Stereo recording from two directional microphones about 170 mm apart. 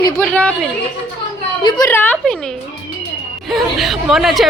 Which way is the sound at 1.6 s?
25° left (ahead or behind).